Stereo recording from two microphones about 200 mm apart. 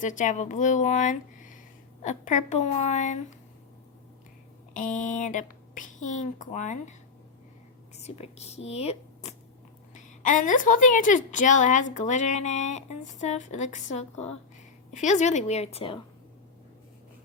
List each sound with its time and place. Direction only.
0.0 s speech: 40° left (ahead or behind)
4.7 s speech: 40° left (ahead or behind)
7.9 s speech: 30° left (ahead or behind)